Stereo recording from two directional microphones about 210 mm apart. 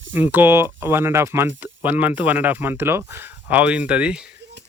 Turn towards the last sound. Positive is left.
turn(degrees=-5)  # may be behind; listen again after turning